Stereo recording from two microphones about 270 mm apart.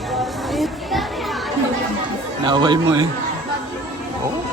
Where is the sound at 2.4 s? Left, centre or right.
Centre.